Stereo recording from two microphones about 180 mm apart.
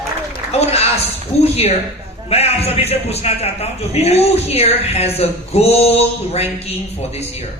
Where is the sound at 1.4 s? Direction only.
35° left (ahead or behind).